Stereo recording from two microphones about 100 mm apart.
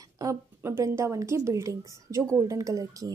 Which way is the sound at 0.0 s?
35° right (ahead or behind).